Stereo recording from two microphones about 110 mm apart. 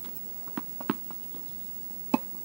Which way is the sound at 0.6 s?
5° right (ahead or behind).